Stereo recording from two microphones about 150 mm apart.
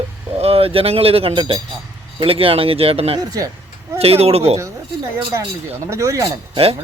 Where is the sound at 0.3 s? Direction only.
40° right (ahead or behind).